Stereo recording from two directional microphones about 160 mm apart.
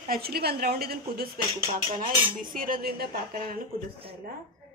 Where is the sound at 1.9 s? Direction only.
60° right (ahead or behind).